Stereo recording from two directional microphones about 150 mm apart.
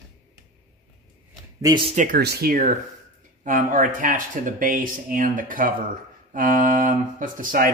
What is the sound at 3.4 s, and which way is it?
Speech, 60° right (ahead or behind).